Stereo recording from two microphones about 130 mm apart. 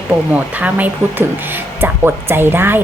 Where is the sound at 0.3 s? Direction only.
10° right (ahead or behind).